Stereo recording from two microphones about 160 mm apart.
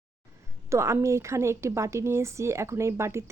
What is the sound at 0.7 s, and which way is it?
A woman's voice, 15° right (ahead or behind).